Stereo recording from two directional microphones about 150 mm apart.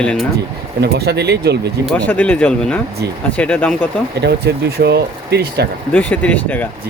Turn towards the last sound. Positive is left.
turn(degrees=10)  # may be behind; listen again after turning